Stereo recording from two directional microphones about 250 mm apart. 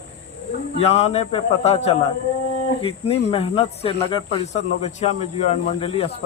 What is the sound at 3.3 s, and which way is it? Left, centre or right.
Speech, left.